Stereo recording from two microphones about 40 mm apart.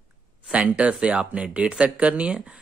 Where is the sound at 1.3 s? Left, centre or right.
Right.